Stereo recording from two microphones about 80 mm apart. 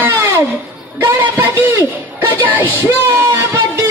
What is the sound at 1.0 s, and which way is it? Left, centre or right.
Music, right.